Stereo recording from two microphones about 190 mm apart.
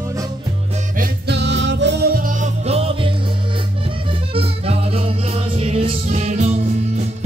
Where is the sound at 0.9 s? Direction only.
60° right (ahead or behind); by 3.1 s 30° right (ahead or behind).